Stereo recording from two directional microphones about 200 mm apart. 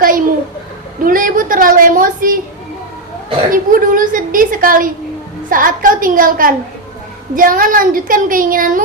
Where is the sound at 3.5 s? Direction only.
45° right (ahead or behind).